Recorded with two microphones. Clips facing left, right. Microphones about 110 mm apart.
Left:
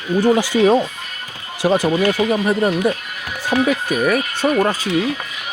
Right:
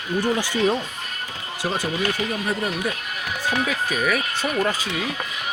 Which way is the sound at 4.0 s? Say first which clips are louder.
Left 6 dB; 45° left (ahead or behind).